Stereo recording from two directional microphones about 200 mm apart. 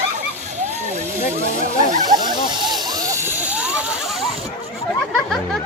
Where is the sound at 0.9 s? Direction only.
40° right (ahead or behind).